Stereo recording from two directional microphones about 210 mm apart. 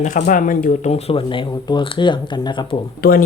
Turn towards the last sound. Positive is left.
turn(degrees=50)  # may be behind; listen again after turning